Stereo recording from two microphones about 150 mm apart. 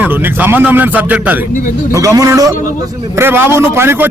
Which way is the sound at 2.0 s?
20° right (ahead or behind).